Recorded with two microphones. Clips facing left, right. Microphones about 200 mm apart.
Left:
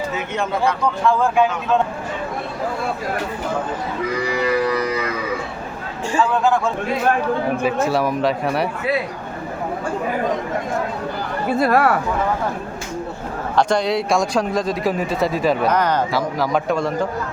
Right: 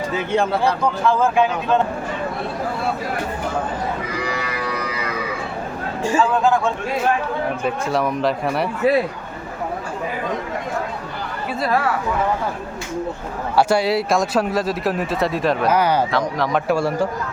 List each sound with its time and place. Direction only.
1.0 s speech: centre (ahead or behind)
6.1 s speech: centre (ahead or behind)
7.6 s speech: 5° left (ahead or behind)
11.6 s speech: 55° left (ahead or behind)
13.6 s speech: 5° right (ahead or behind)
16.1 s a man's voice: centre (ahead or behind)